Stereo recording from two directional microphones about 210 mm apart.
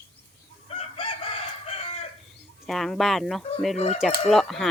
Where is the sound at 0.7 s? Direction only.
25° left (ahead or behind).